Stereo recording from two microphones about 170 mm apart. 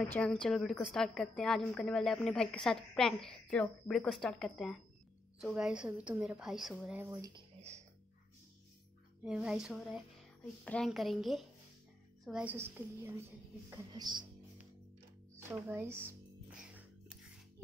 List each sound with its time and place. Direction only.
0.1 s a woman's voice: 5° left (ahead or behind)
7.0 s speech: 20° right (ahead or behind)
9.2 s a woman's voice: 5° right (ahead or behind); by 14.2 s 25° right (ahead or behind)
15.3 s music: 15° right (ahead or behind)